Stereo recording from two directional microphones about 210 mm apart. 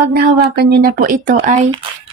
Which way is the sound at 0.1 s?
50° right (ahead or behind).